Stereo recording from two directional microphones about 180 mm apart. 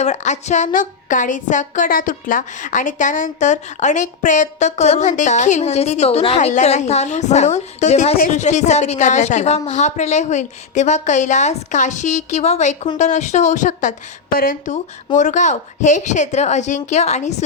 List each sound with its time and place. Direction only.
0.0 s a woman's voice: 40° left (ahead or behind)